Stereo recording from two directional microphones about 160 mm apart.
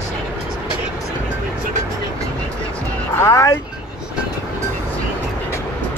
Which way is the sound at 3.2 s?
20° left (ahead or behind).